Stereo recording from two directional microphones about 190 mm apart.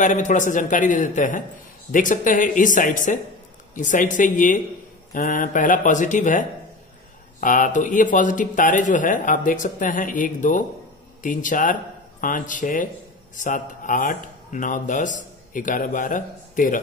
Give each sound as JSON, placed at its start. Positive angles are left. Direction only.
{"t": 0.0, "sound": "speech", "side_deg": 40}